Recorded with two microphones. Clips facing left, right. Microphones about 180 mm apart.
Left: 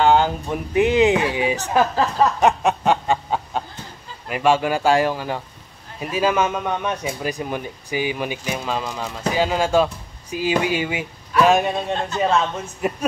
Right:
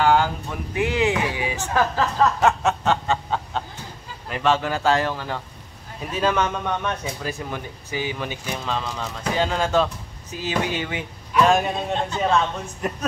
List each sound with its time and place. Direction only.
0.0 s speech: 20° left (ahead or behind); by 11.7 s 5° left (ahead or behind)
12.8 s speech: 5° left (ahead or behind)